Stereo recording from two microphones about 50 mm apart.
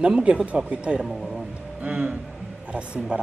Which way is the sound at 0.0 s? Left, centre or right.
Centre.